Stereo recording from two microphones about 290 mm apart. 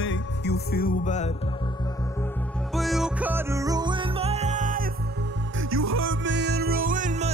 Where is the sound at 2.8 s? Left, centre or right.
Centre; by 4.8 s right.